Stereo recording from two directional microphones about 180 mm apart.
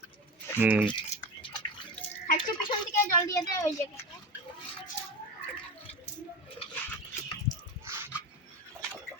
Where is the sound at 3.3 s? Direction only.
15° left (ahead or behind).